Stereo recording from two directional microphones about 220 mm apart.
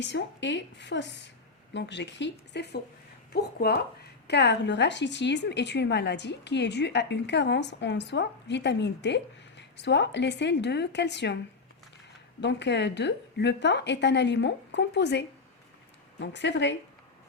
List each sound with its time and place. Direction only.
0.0 s a woman's voice: 55° left (ahead or behind)
12.4 s a woman's voice: 50° left (ahead or behind)
16.2 s a woman's voice: 55° left (ahead or behind)